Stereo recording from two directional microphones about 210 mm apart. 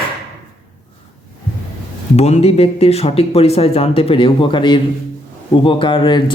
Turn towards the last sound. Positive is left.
turn(degrees=20)  # may be behind; listen again after turning